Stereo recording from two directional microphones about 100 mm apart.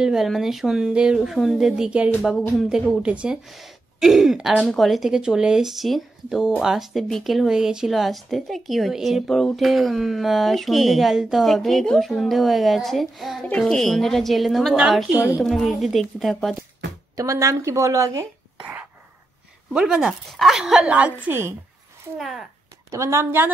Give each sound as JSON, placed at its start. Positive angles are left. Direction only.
{"t": 0.0, "sound": "speech", "side_deg": -5}
{"t": 15.1, "sound": "speech", "side_deg": -15}
{"t": 15.4, "sound": "speech", "side_deg": 0}
{"t": 17.1, "sound": "speech", "side_deg": -35}
{"t": 18.6, "sound": "whispering", "side_deg": -20}
{"t": 19.7, "sound": "speech", "side_deg": -10}
{"t": 22.8, "sound": "a woman's voice", "side_deg": -30}